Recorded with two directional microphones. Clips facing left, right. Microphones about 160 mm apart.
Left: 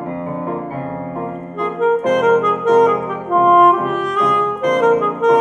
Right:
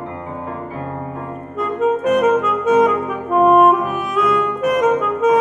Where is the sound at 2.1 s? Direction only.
5° right (ahead or behind).